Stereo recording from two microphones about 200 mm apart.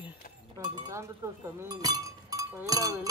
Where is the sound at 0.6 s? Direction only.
15° right (ahead or behind).